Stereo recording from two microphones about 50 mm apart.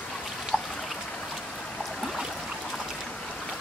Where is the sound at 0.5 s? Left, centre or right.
Centre.